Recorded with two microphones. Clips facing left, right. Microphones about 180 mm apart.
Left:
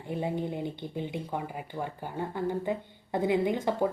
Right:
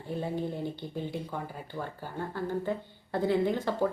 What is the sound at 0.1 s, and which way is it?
Speech, 15° left (ahead or behind).